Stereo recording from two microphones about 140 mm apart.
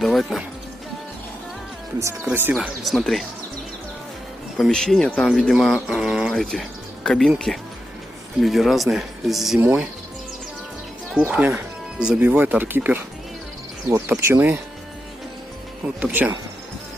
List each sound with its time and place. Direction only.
0.0 s speech: centre (ahead or behind)
2.2 s speech: 10° right (ahead or behind)
2.8 s speech: centre (ahead or behind)
4.6 s speech: 5° left (ahead or behind)
11.1 s speech: 5° right (ahead or behind)
15.8 s speech: 10° right (ahead or behind)